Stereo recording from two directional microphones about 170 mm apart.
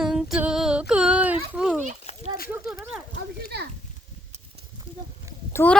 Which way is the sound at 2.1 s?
40° left (ahead or behind).